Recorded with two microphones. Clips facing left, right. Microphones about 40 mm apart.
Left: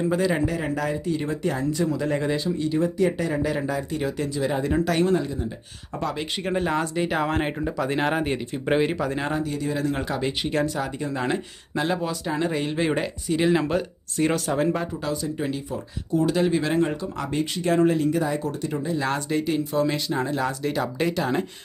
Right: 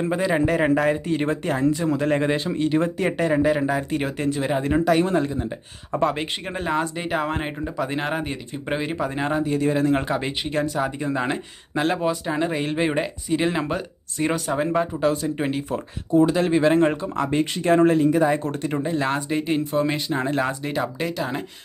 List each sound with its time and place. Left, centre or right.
0.1 s speech: right
0.4 s speech: right
2.6 s speech: right
6.7 s speech: centre
9.0 s speech: centre
9.6 s speech: right
10.2 s speech: centre
10.8 s speech: centre
15.0 s speech: right
16.3 s speech: right
19.0 s speech: right
21.0 s speech: centre